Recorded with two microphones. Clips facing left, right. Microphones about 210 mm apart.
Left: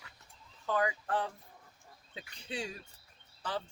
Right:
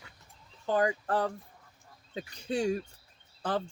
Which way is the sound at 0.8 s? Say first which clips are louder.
Right 5 dB; 40° right (ahead or behind).